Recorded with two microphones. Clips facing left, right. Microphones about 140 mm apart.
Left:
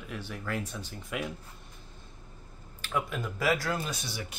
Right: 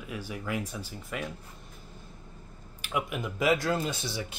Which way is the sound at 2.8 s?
15° right (ahead or behind).